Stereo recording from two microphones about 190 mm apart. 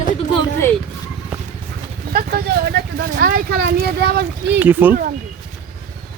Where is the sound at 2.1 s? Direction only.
55° right (ahead or behind).